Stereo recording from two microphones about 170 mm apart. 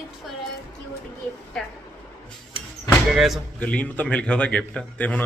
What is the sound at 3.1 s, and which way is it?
A man's voice, centre (ahead or behind).